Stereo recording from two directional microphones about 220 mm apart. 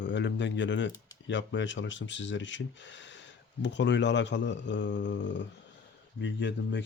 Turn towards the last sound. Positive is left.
turn(degrees=55)  # may be behind; listen again after turning